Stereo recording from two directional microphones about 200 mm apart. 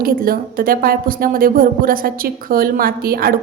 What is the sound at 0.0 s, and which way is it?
A woman's voice, 45° right (ahead or behind).